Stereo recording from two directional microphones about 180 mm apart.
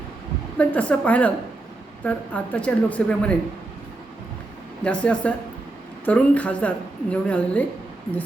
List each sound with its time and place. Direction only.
0.6 s a woman's voice: 10° left (ahead or behind)
4.8 s a woman's voice: 5° left (ahead or behind)